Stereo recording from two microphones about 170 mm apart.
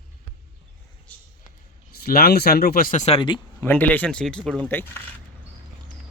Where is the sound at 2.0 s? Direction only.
65° left (ahead or behind); by 3.2 s 45° left (ahead or behind).